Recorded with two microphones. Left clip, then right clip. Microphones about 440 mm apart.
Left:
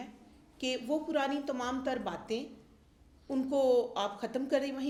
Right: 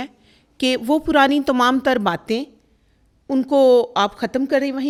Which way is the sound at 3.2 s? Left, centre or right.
Right.